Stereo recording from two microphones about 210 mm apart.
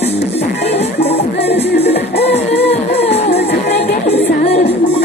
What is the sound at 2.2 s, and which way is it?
Music, 30° left (ahead or behind).